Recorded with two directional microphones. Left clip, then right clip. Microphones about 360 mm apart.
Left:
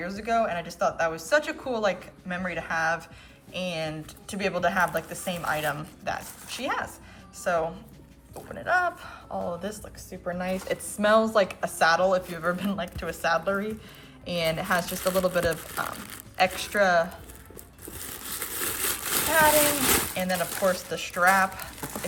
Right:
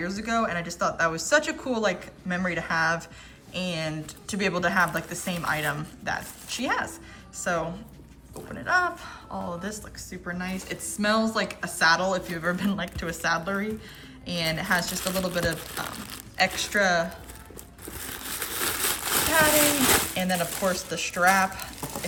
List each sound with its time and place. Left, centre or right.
0.0 s a woman's voice: centre
18.0 s crumpling: centre